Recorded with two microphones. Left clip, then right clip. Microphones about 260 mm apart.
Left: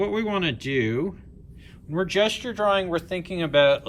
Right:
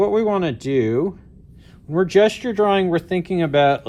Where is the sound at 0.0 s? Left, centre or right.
Centre.